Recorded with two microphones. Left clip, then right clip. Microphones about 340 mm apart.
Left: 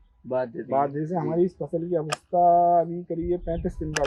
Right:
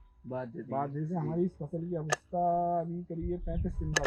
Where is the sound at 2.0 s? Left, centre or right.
Right.